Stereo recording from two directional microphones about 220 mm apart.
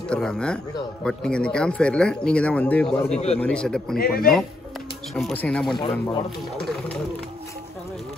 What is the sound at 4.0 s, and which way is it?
Speech, 40° left (ahead or behind).